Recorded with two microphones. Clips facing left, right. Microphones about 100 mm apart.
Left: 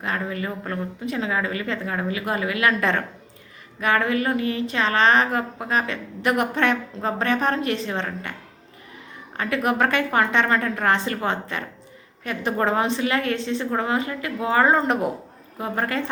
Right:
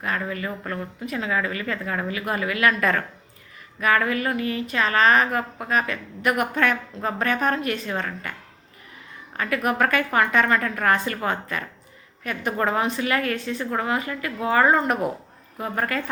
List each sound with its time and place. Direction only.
0.0 s a woman's voice: 30° left (ahead or behind)
9.6 s a woman's voice: 30° left (ahead or behind)